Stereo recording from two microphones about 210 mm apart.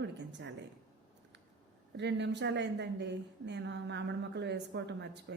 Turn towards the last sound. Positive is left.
turn(degrees=-55)  # may be behind; listen again after turning